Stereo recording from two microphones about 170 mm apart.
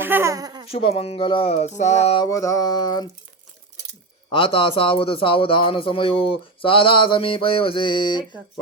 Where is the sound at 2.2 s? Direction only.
20° left (ahead or behind).